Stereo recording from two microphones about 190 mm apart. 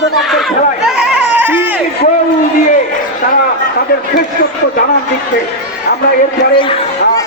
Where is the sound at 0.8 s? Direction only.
5° right (ahead or behind).